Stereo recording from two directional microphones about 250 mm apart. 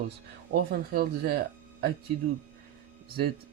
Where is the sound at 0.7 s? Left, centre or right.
Right.